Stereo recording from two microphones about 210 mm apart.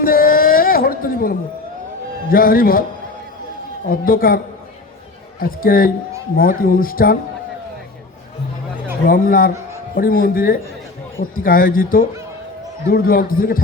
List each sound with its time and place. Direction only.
0.0 s a sound: 45° left (ahead or behind)
2.3 s speech: 45° left (ahead or behind)
3.8 s speech: 45° left (ahead or behind)
5.4 s speech: 45° left (ahead or behind)
9.0 s a man's voice: 40° left (ahead or behind)